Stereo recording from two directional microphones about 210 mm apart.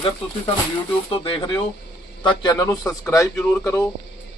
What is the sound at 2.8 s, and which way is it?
Speech, 5° left (ahead or behind).